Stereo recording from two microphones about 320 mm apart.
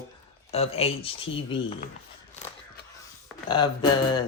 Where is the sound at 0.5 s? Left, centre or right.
Centre.